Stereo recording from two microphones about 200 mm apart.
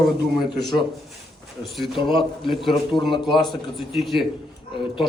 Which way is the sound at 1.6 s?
Centre (ahead or behind).